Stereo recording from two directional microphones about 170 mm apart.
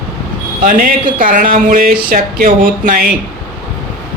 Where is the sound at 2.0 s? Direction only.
55° right (ahead or behind).